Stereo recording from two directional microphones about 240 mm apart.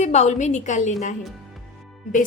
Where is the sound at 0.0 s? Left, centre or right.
Left.